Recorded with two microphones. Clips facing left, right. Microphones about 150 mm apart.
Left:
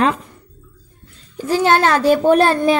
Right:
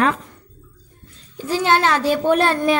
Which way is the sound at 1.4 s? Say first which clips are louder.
Left 3 dB; 45° left (ahead or behind).